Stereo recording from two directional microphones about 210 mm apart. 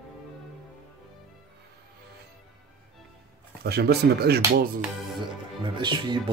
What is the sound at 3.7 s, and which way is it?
Speech, 50° right (ahead or behind).